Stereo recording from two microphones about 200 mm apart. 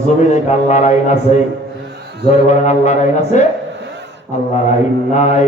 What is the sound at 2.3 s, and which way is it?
Speech, 35° left (ahead or behind).